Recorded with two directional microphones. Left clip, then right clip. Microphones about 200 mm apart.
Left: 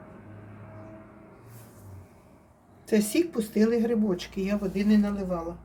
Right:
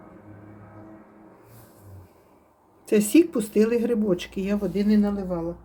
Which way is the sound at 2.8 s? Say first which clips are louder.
Right 6 dB; 40° right (ahead or behind).